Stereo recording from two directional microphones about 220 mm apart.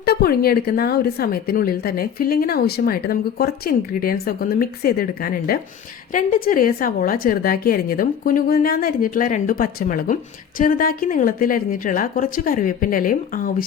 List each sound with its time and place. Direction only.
0.0 s a woman's voice: 45° left (ahead or behind)